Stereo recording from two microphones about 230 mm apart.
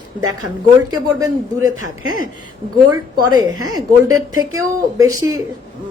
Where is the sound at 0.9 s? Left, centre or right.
Centre.